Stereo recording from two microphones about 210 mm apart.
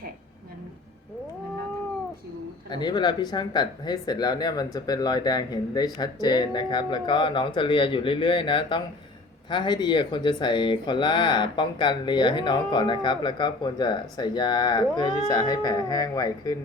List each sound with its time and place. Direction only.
2.6 s speech: 20° left (ahead or behind)